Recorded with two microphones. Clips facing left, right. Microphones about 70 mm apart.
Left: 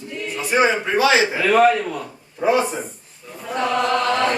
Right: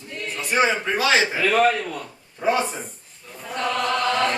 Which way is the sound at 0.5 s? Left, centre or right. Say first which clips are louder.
Left 3 dB; centre.